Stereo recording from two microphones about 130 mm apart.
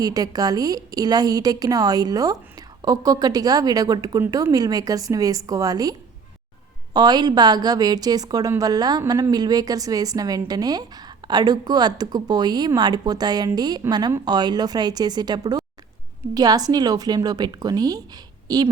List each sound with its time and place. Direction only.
0.0 s a woman's voice: 30° right (ahead or behind)